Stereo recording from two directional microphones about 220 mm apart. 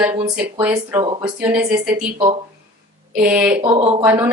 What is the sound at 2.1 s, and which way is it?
Speech, 25° right (ahead or behind).